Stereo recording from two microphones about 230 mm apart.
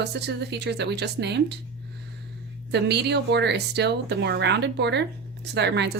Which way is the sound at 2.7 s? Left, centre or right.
Right.